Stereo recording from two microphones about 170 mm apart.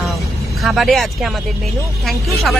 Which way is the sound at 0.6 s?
Centre (ahead or behind).